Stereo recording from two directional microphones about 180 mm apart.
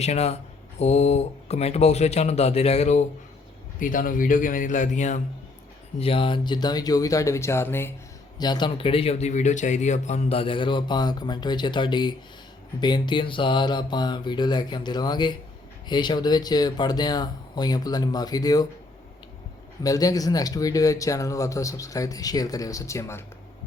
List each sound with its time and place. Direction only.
0.0 s a man's voice: 35° left (ahead or behind)
6.0 s speech: 30° left (ahead or behind); by 7.9 s 15° left (ahead or behind)
8.4 s speech: 25° left (ahead or behind)
19.8 s speech: 20° left (ahead or behind)